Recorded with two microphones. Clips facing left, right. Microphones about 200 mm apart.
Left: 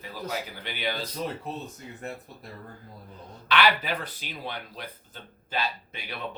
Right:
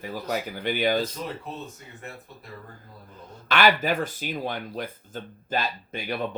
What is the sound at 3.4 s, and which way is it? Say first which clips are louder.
Speech: right 3 dB; 45° right (ahead or behind).